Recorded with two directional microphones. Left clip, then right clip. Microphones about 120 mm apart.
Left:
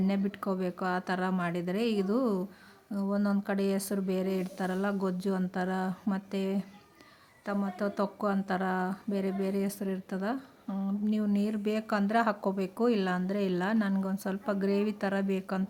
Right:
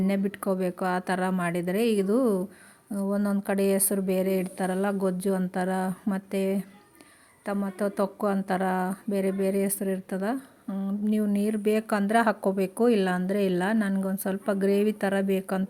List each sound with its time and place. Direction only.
0.1 s a woman's voice: 30° right (ahead or behind)